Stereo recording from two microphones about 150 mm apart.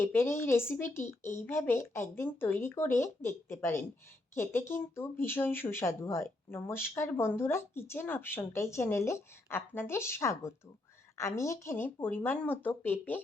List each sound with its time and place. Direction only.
0.0 s speech: 15° left (ahead or behind)